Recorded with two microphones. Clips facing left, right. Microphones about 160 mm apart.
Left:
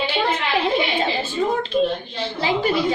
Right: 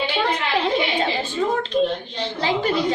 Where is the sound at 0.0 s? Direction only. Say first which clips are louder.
Even; 10° left (ahead or behind).